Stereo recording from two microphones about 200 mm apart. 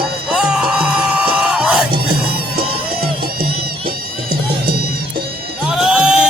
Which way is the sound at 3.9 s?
50° right (ahead or behind).